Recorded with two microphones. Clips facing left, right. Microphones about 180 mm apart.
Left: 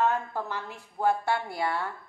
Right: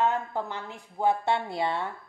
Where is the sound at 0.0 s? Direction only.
20° right (ahead or behind).